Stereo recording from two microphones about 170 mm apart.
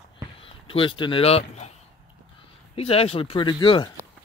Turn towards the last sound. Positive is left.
turn(degrees=25)  # may be behind; listen again after turning